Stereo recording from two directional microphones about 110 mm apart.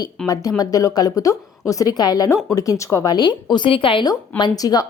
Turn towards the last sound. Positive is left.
turn(degrees=35)  # may be behind; listen again after turning